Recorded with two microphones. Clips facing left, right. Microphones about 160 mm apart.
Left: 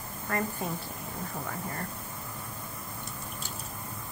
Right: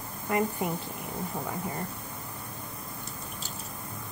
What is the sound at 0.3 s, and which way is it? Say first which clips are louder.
Speech: right 4 dB; 15° right (ahead or behind).